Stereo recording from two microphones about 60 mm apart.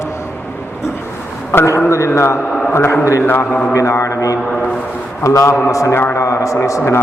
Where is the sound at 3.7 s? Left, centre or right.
Left.